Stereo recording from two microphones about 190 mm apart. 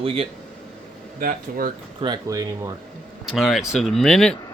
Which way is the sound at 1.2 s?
45° right (ahead or behind).